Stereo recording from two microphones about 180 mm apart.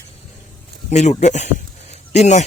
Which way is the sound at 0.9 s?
40° left (ahead or behind).